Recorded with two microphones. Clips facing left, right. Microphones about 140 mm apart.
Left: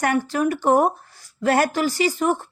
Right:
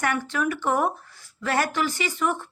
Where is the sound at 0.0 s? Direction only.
40° left (ahead or behind).